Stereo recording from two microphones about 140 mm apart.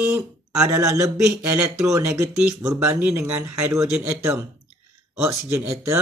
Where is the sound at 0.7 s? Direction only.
25° right (ahead or behind).